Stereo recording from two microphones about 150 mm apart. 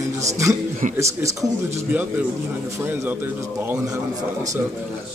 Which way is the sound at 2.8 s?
15° right (ahead or behind).